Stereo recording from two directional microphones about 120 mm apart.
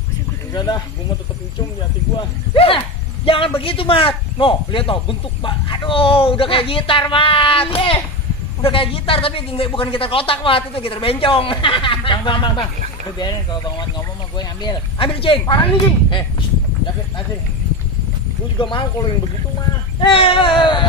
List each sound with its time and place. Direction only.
0.5 s speech: 35° left (ahead or behind)
2.1 s speech: 50° left (ahead or behind)
15.1 s speech: 50° left (ahead or behind)
18.6 s speech: 45° left (ahead or behind)
20.0 s speech: 50° left (ahead or behind)